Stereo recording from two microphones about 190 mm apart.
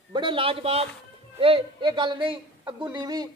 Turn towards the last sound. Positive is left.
turn(degrees=-20)  # may be behind; listen again after turning